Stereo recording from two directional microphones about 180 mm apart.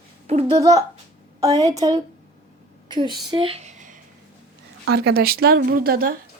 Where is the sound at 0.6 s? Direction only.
20° right (ahead or behind); by 4.0 s 40° right (ahead or behind).